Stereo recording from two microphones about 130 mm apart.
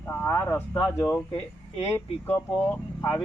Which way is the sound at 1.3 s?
45° left (ahead or behind).